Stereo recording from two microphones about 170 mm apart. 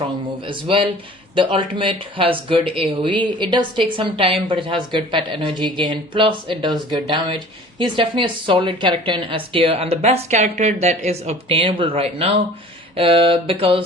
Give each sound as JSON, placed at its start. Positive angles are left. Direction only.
{"t": 0.0, "sound": "speech", "side_deg": -30}